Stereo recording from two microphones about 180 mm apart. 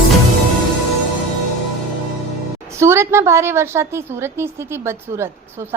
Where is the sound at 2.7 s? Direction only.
15° right (ahead or behind).